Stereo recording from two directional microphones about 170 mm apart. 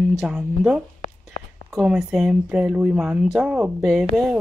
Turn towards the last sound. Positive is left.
turn(degrees=0)  # may be behind; listen again after turning